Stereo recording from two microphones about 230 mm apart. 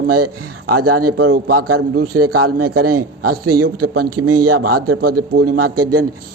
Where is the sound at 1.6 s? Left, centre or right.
Right.